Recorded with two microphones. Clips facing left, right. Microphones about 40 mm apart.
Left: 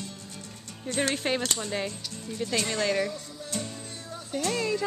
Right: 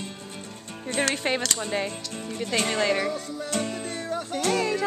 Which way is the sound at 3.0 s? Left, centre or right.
Right.